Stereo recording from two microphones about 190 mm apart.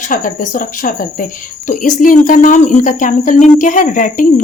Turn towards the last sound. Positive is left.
turn(degrees=45)  # may be behind; listen again after turning